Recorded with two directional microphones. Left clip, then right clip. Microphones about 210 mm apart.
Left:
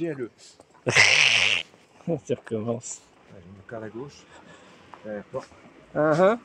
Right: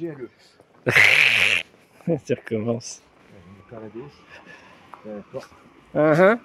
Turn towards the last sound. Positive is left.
turn(degrees=-30)  # may be behind; listen again after turning